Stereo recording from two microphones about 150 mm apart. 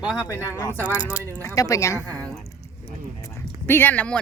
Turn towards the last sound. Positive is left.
turn(degrees=10)  # may be behind; listen again after turning